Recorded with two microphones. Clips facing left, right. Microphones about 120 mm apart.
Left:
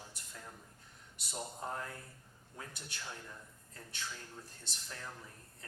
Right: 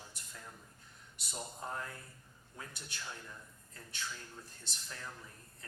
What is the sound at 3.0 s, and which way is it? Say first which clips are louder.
Speech: even; 35° left (ahead or behind).